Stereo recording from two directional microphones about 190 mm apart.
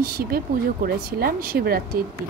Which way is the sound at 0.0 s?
55° right (ahead or behind).